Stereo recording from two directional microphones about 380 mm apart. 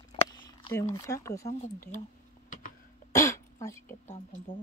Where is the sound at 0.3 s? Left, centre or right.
Centre.